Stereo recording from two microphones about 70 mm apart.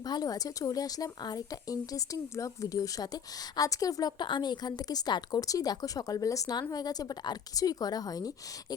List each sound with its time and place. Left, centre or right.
0.0 s speech: left
6.6 s speech: left